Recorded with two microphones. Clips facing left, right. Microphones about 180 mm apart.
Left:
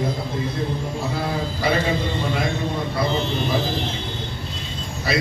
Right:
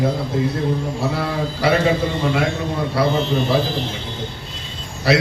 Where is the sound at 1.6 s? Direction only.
80° right.